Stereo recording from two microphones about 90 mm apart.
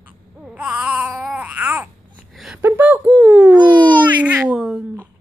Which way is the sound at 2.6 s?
25° right (ahead or behind).